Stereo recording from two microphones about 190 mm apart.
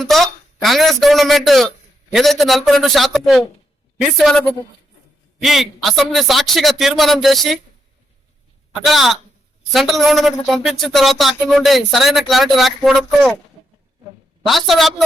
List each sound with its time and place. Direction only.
0.0 s speech: centre (ahead or behind)
8.7 s speech: centre (ahead or behind)
14.4 s speech: centre (ahead or behind)